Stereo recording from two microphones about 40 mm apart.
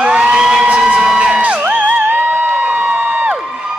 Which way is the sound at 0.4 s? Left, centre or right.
Centre.